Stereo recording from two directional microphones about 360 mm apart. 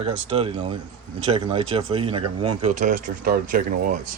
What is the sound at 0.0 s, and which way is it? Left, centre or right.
Speech, centre.